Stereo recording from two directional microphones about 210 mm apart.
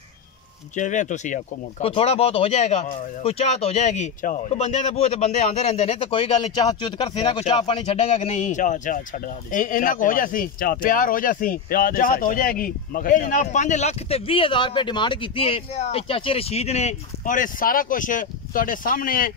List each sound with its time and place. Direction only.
0.7 s speech: 35° left (ahead or behind)